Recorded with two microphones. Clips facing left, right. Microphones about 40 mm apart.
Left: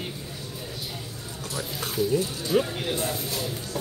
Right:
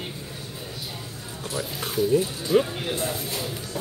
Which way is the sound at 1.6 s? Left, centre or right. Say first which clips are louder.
Right 2 dB; centre.